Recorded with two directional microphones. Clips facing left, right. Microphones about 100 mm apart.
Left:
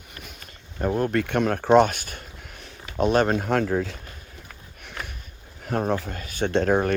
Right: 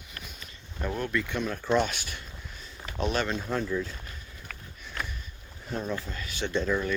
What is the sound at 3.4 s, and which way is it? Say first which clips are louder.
Speech: left 7 dB; 85° left.